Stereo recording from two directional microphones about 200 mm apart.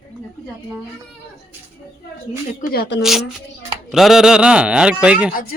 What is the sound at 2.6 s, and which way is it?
Speech, 55° left (ahead or behind).